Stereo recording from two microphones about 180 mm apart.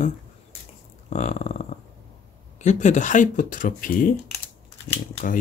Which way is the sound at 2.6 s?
40° left (ahead or behind).